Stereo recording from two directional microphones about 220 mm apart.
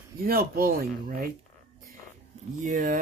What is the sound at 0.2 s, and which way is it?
Speech, 40° right (ahead or behind).